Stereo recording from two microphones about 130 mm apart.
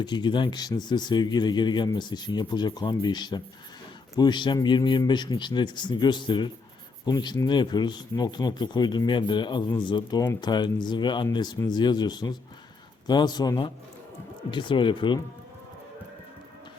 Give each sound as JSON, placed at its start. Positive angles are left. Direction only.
{"t": 0.0, "sound": "speech", "side_deg": 35}